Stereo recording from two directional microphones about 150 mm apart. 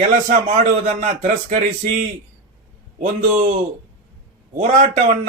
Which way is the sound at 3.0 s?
55° right (ahead or behind).